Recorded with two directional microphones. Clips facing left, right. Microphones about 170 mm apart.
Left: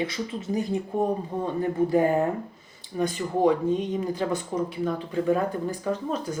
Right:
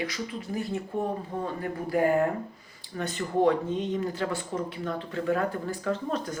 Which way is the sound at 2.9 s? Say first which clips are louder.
Left 3 dB; 10° left (ahead or behind).